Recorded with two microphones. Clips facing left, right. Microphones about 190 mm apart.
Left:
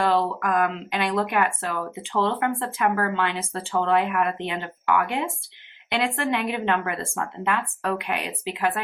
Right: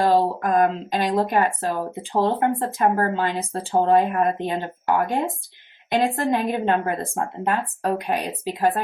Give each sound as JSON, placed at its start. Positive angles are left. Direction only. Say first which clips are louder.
{"t": 0.0, "sound": "speech", "louder": "right 3 dB", "side_deg": -40}